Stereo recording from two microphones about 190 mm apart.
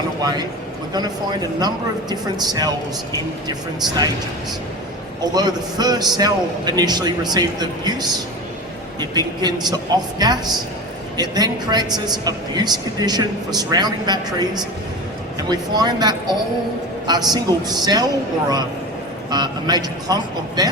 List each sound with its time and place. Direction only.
0.2 s speech: 20° right (ahead or behind)
3.8 s speech: 20° right (ahead or behind)
5.2 s speech: 20° right (ahead or behind)
19.3 s speech: 20° right (ahead or behind)